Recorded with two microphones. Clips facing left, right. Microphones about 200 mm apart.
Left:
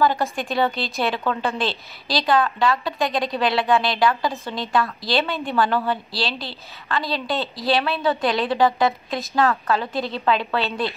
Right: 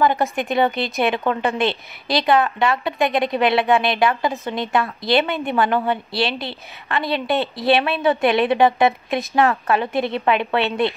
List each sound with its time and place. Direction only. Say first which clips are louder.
0.0 s a woman's voice: right 2 dB; 20° right (ahead or behind)